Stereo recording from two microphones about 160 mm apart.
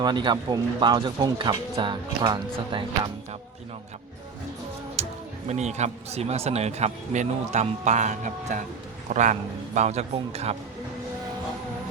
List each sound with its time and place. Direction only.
0.0 s speech: 25° right (ahead or behind)
5.0 s music: 45° right (ahead or behind)
5.5 s speech: 45° right (ahead or behind)